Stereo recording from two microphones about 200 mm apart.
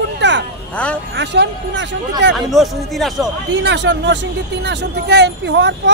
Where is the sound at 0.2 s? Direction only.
60° right (ahead or behind).